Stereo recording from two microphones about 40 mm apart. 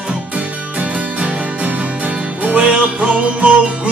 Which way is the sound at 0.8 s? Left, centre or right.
Right.